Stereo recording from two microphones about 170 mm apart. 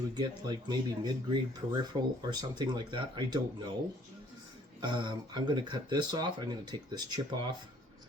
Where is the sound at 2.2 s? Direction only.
25° right (ahead or behind).